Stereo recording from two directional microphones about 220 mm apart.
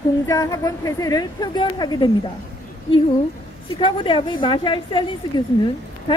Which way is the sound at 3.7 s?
25° left (ahead or behind).